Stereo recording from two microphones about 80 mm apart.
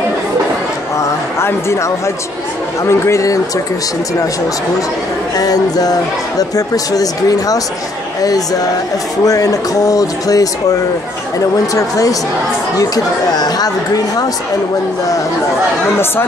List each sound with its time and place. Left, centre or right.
0.9 s a sound: left
2.8 s speech: left
5.4 s speech: left